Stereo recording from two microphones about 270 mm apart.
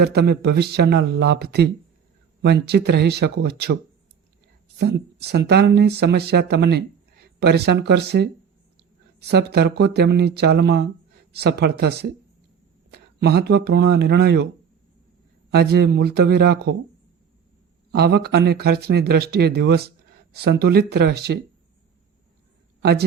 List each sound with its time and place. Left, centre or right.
0.0 s speech: right
4.8 s speech: right
9.3 s speech: right
15.5 s speech: right
17.9 s speech: right
22.8 s a man's voice: right